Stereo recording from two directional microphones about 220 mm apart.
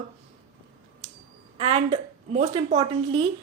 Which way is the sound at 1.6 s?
25° right (ahead or behind).